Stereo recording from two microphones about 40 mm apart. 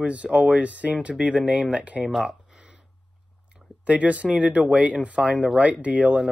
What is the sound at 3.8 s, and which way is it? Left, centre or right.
Speech, right.